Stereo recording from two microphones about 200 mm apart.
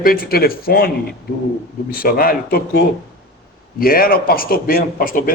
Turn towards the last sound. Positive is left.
turn(degrees=45)  # may be behind; listen again after turning